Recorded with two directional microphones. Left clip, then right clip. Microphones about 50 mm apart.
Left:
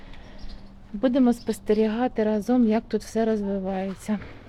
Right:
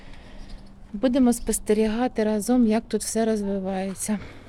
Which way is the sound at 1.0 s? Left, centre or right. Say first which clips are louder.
Even; right.